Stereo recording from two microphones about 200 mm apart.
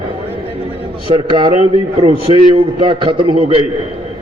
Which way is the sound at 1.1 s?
25° right (ahead or behind).